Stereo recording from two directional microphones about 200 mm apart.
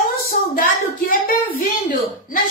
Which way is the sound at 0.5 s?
45° left (ahead or behind).